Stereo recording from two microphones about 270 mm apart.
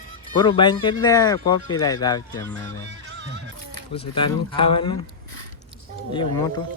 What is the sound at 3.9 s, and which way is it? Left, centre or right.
Speech, centre.